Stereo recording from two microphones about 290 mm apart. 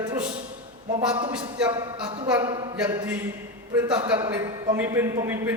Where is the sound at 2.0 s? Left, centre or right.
Centre.